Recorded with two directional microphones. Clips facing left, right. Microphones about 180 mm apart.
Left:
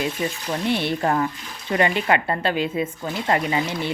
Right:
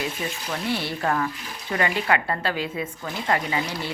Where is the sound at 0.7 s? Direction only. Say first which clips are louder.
Left 4 dB; 20° left (ahead or behind).